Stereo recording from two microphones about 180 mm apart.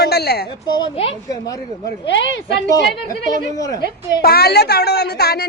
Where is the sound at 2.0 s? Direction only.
90° left.